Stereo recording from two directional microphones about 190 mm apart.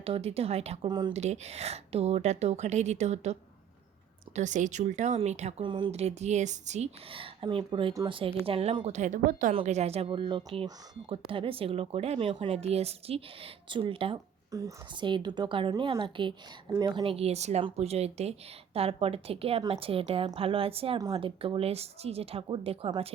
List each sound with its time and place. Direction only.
0.0 s speech: 30° right (ahead or behind)
0.9 s speech: 20° right (ahead or behind)
1.1 s speech: 35° right (ahead or behind)
4.4 s speech: 40° right (ahead or behind)